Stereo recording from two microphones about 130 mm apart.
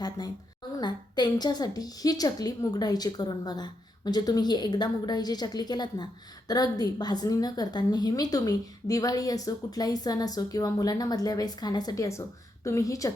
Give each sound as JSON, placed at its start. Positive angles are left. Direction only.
{"t": 0.2, "sound": "a woman's voice", "side_deg": 30}